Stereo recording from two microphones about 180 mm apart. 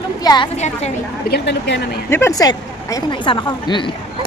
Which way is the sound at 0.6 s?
40° left (ahead or behind).